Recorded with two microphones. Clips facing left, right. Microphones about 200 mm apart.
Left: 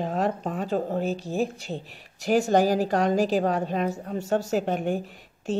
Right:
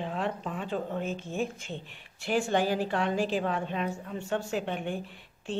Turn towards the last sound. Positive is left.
turn(degrees=40)  # may be behind; listen again after turning